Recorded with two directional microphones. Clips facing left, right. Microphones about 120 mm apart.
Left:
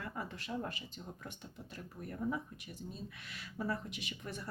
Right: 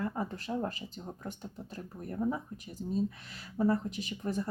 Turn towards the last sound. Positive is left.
turn(degrees=-35)  # may be behind; listen again after turning